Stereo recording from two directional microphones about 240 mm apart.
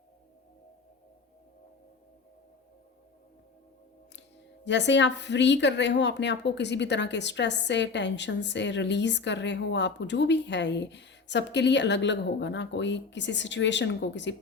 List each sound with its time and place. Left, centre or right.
4.6 s speech: left